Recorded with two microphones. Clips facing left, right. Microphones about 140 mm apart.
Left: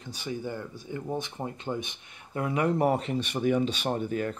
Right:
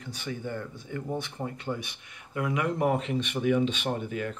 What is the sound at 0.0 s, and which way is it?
Speech, 15° left (ahead or behind).